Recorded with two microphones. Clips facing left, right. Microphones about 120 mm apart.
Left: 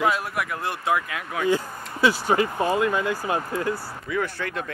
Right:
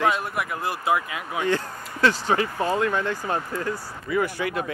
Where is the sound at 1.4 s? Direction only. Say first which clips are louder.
Left 2 dB; 10° left (ahead or behind).